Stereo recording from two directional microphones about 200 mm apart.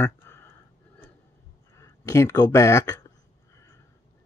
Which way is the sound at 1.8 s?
15° left (ahead or behind).